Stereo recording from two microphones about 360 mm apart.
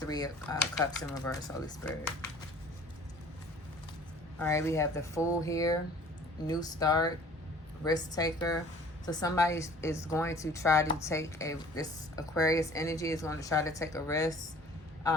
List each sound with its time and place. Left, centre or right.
0.0 s a woman's voice: centre
4.4 s a woman's voice: centre